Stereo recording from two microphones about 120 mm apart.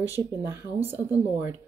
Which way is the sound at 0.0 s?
20° right (ahead or behind).